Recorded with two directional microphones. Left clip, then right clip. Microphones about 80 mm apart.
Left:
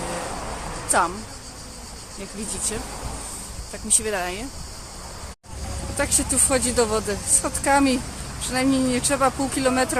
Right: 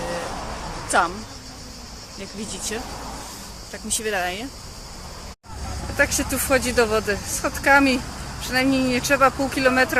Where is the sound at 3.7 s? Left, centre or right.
Centre.